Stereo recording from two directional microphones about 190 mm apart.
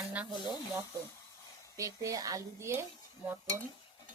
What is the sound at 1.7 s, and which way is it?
Dishes, 15° right (ahead or behind).